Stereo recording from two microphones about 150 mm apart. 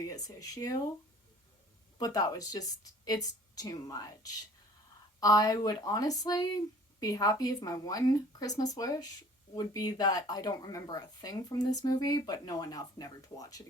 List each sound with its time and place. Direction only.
0.0 s speech: 25° left (ahead or behind)
2.0 s speech: 25° left (ahead or behind)